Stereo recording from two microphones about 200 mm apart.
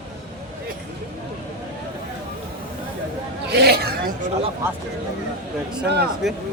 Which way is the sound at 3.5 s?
55° right (ahead or behind).